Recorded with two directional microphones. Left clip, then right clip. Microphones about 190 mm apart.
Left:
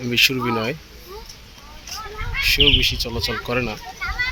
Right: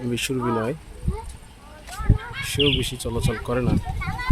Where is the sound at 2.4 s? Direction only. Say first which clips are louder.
Left 7 dB; 20° right (ahead or behind).